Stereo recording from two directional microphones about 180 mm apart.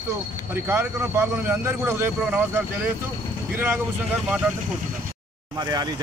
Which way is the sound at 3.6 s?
10° right (ahead or behind).